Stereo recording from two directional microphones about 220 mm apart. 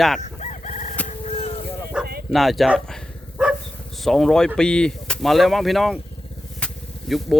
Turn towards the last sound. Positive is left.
turn(degrees=0)  # may be behind; listen again after turning